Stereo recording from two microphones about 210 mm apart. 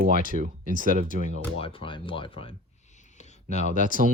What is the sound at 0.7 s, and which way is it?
Speech, 40° right (ahead or behind).